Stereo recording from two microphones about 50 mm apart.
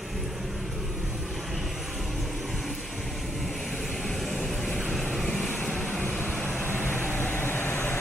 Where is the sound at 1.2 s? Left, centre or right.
Centre.